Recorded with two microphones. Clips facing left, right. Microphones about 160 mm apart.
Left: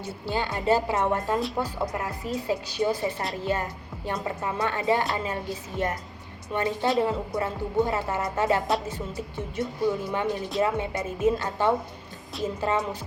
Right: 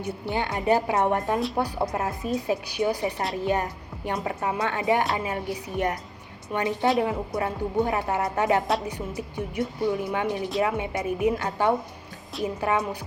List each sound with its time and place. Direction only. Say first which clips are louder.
0.0 s speech: right 1 dB; 20° right (ahead or behind)